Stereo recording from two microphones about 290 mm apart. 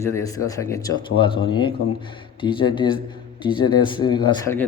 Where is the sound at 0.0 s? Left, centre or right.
Centre.